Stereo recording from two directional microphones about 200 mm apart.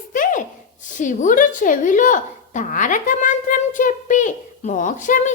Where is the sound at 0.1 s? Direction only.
40° left (ahead or behind).